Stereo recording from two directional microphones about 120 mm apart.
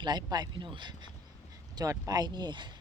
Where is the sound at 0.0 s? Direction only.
35° right (ahead or behind).